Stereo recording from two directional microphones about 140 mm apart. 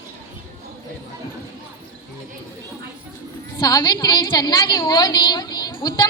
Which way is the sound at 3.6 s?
25° left (ahead or behind).